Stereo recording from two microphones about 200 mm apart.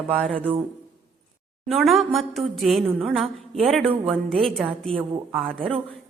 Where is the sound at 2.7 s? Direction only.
30° right (ahead or behind).